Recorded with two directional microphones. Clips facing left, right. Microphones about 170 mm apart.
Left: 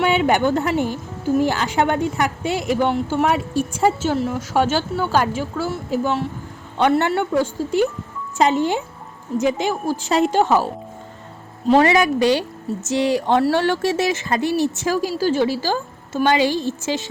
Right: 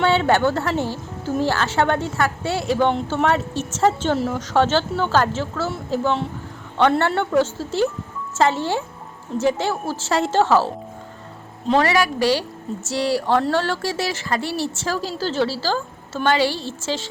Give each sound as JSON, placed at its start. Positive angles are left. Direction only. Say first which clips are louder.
{"t": 0.0, "sound": "speech", "louder": "even", "side_deg": 15}
{"t": 11.8, "sound": "speech", "louder": "left 2 dB", "side_deg": 20}